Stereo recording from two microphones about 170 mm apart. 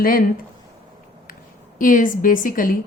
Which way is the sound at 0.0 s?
55° left (ahead or behind).